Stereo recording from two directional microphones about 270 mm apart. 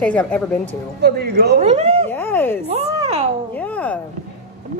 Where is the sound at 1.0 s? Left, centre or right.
Right.